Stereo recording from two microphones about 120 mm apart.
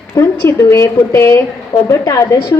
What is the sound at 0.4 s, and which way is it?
A woman's voice, 25° left (ahead or behind).